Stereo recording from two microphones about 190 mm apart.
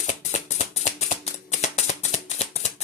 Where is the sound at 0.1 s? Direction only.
40° left (ahead or behind).